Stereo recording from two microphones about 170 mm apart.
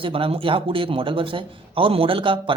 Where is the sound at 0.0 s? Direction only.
30° right (ahead or behind).